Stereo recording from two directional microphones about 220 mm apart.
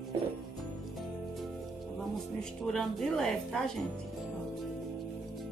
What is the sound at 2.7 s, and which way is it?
Speech, centre (ahead or behind).